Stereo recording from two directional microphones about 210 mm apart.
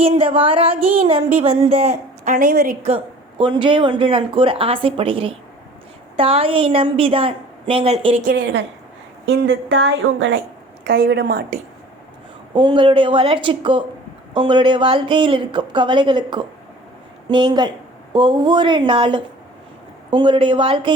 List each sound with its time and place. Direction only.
0.0 s speech: 25° right (ahead or behind); by 2.7 s 45° right (ahead or behind)
2.8 s speech: 25° right (ahead or behind)
8.3 s a woman's voice: 55° right (ahead or behind)
10.8 s a woman's voice: 50° right (ahead or behind)
12.5 s speech: 25° right (ahead or behind)